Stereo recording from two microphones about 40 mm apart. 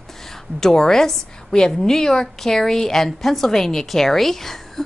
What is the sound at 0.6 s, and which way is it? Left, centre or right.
A woman's voice, centre.